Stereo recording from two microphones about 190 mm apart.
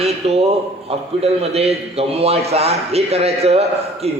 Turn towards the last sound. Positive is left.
turn(degrees=-35)  # may be behind; listen again after turning